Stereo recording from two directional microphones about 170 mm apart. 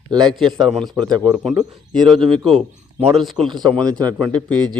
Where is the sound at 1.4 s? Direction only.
Centre (ahead or behind).